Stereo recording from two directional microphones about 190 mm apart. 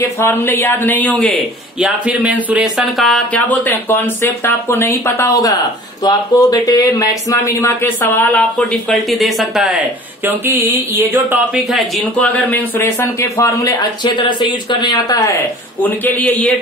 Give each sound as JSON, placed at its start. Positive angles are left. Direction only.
{"t": 0.2, "sound": "speech", "side_deg": 10}
{"t": 1.8, "sound": "speech", "side_deg": -5}
{"t": 3.0, "sound": "speech", "side_deg": 5}
{"t": 11.0, "sound": "speech", "side_deg": -10}
{"t": 12.2, "sound": "speech", "side_deg": 10}